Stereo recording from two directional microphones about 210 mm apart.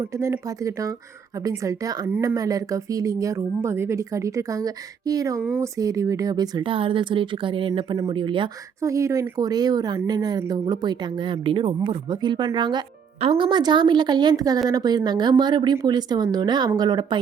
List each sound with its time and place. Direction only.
0.0 s a woman's voice: 15° right (ahead or behind)